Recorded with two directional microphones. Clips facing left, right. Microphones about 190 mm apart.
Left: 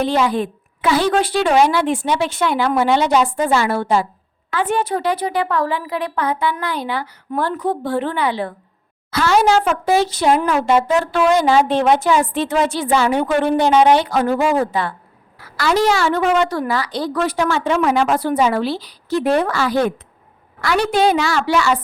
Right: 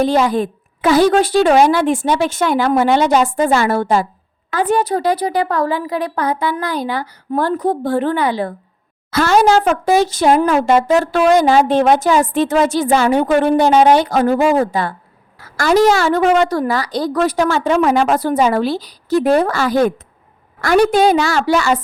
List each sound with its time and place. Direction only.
0.0 s a woman's voice: 45° right (ahead or behind)
20.9 s speech: 45° right (ahead or behind)